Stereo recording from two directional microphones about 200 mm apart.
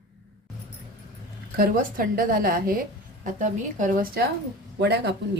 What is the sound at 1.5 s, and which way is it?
A woman's voice, 45° right (ahead or behind).